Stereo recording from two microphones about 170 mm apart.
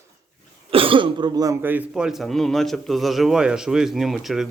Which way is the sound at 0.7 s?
30° right (ahead or behind).